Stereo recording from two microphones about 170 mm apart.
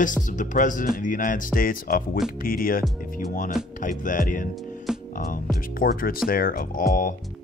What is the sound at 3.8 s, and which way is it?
Speech, 50° left (ahead or behind).